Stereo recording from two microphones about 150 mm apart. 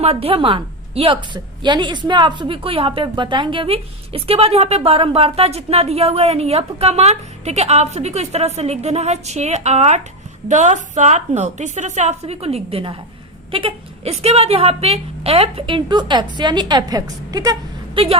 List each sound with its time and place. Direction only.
0.0 s a woman's voice: 40° right (ahead or behind)